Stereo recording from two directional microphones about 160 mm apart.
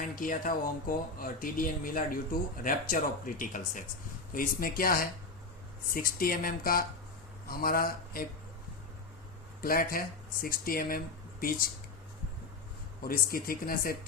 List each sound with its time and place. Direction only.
0.2 s speech: 60° left (ahead or behind)
9.6 s speech: 65° left (ahead or behind)
13.0 s speech: 65° left (ahead or behind)